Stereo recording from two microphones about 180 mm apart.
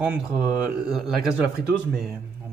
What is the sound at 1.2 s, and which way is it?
Speech, 55° right (ahead or behind).